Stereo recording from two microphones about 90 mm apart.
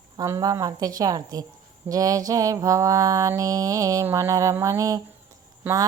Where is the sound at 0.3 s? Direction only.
35° right (ahead or behind).